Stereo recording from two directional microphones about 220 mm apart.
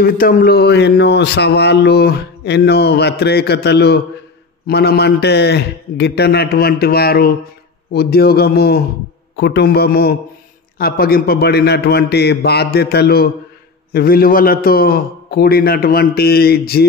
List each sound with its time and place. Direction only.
0.0 s speech: 40° left (ahead or behind)